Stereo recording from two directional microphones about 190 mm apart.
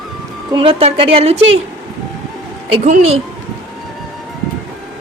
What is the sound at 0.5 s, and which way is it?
Speech, 30° right (ahead or behind).